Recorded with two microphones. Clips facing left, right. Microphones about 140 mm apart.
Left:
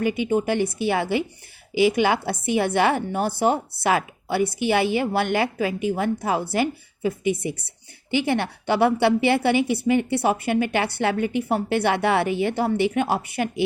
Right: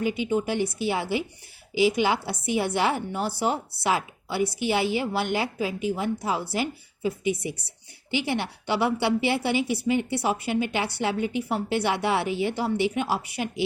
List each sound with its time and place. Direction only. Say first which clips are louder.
0.0 s a woman's voice: left 3 dB; 55° left (ahead or behind)